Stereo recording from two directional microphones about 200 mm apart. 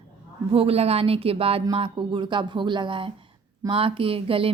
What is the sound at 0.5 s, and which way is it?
A woman's voice, 30° right (ahead or behind).